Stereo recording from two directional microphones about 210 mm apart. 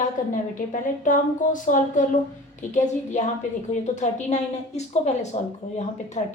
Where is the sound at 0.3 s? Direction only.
40° left (ahead or behind).